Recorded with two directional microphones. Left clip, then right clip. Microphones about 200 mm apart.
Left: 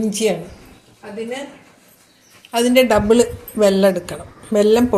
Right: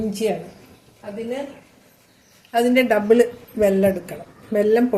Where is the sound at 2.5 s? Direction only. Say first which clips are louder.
Left 3 dB; 25° left (ahead or behind).